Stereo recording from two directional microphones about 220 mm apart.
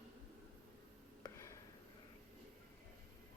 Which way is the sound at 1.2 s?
15° left (ahead or behind).